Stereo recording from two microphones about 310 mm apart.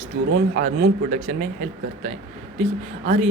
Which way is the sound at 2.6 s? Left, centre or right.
Right.